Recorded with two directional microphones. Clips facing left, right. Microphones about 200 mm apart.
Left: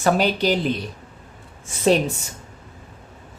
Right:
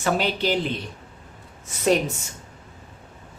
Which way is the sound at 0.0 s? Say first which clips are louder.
Left 4 dB; 40° left (ahead or behind).